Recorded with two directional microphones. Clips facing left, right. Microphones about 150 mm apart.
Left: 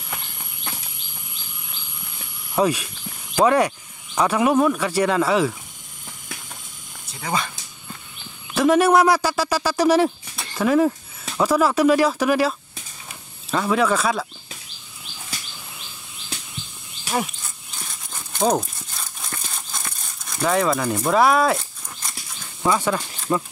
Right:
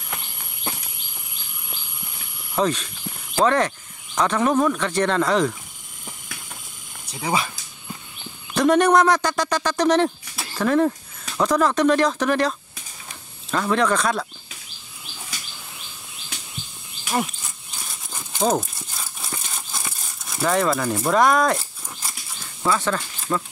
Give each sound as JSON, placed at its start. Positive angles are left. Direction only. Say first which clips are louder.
{"t": 0.7, "sound": "insect", "louder": "right 4 dB", "side_deg": -25}
{"t": 2.5, "sound": "speech", "louder": "left 2 dB", "side_deg": 10}
{"t": 7.1, "sound": "speech", "louder": "right 2 dB", "side_deg": -15}
{"t": 8.5, "sound": "speech", "louder": "left 1 dB", "side_deg": 5}
{"t": 10.3, "sound": "a sound", "louder": "right 1 dB", "side_deg": -5}
{"t": 10.6, "sound": "speech", "louder": "left 1 dB", "side_deg": 5}
{"t": 18.1, "sound": "crumpling", "louder": "left 1 dB", "side_deg": 0}
{"t": 22.6, "sound": "speech", "louder": "left 2 dB", "side_deg": 10}